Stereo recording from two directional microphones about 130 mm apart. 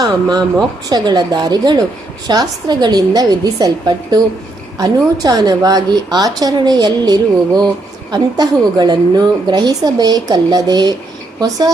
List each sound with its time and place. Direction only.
0.0 s a woman's voice: 30° right (ahead or behind)